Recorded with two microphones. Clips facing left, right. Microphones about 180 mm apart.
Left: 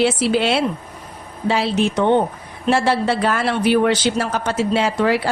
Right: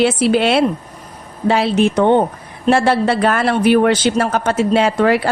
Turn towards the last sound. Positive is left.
turn(degrees=-55)  # may be behind; listen again after turning